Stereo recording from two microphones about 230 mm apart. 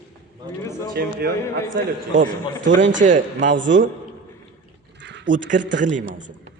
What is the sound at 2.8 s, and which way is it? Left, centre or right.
Speech, right.